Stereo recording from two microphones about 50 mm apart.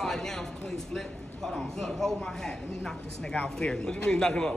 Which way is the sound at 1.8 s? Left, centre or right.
Centre.